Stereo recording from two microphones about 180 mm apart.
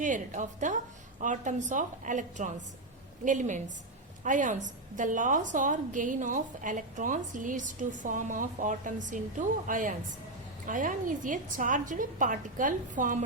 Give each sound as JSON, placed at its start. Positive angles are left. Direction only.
{"t": 0.0, "sound": "a woman's voice", "side_deg": -45}